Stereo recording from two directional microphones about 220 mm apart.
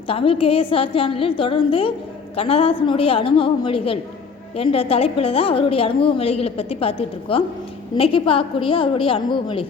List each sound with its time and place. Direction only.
0.1 s a woman's voice: 25° left (ahead or behind)